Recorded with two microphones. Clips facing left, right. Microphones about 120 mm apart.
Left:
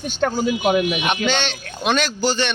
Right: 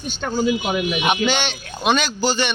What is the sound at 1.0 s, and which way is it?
A man's voice, 10° right (ahead or behind).